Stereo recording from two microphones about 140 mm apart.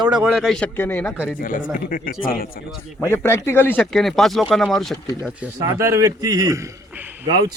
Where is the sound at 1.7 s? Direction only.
80° left.